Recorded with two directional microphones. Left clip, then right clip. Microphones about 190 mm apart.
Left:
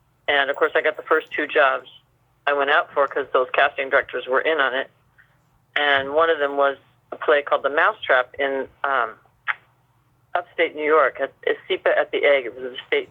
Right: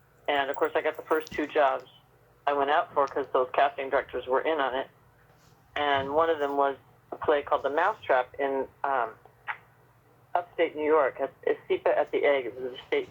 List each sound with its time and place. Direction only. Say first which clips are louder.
0.3 s speech: left 7 dB; 20° left (ahead or behind)
7.5 s speech: left 7 dB; 15° left (ahead or behind)